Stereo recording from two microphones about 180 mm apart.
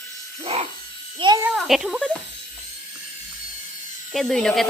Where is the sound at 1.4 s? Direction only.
Centre (ahead or behind).